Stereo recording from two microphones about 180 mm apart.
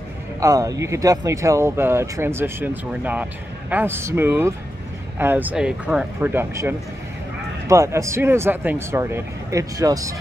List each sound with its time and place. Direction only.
0.4 s speech: 20° right (ahead or behind)